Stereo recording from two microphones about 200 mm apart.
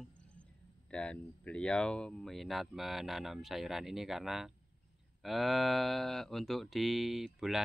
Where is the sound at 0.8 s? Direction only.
5° left (ahead or behind).